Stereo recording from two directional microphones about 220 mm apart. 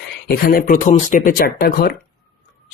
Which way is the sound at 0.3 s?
40° left (ahead or behind).